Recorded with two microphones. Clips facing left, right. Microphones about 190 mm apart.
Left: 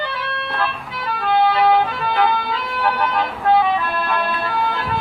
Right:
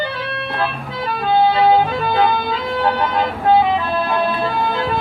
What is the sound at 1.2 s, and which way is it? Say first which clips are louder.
Music: right 2 dB; 30° right (ahead or behind).